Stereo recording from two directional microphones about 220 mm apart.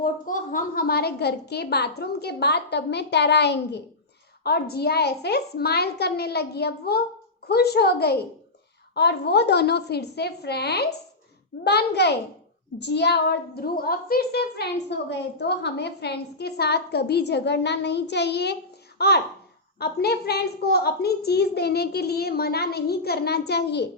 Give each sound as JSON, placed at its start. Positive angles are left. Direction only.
{"t": 0.0, "sound": "a woman's voice", "side_deg": 40}